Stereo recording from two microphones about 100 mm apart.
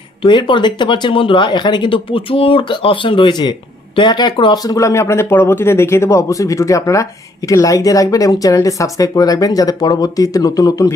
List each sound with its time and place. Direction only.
0.2 s speech: 55° left (ahead or behind)
4.6 s speech: 35° left (ahead or behind)